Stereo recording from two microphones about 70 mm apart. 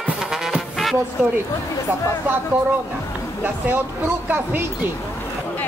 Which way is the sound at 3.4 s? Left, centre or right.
Right.